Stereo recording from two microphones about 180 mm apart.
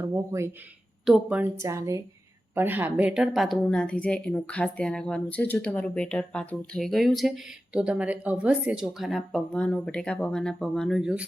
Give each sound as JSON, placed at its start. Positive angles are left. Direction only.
{"t": 0.1, "sound": "a woman's voice", "side_deg": -15}